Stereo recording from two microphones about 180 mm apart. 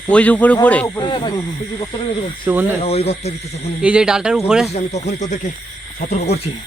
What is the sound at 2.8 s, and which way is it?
Speech, 35° left (ahead or behind).